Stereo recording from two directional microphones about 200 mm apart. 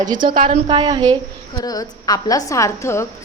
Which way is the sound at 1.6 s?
20° left (ahead or behind).